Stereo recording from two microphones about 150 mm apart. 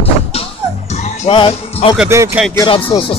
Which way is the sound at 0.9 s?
50° left (ahead or behind).